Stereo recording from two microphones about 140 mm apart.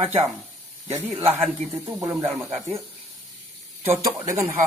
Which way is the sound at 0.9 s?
20° right (ahead or behind).